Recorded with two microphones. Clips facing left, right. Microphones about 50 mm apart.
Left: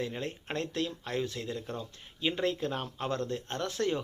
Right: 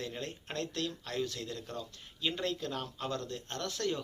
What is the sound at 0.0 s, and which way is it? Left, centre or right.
Speech, left.